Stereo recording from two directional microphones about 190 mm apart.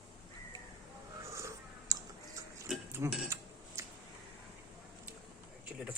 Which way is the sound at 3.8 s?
15° right (ahead or behind).